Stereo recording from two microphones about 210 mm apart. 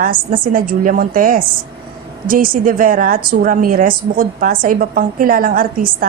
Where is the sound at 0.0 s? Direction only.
40° right (ahead or behind).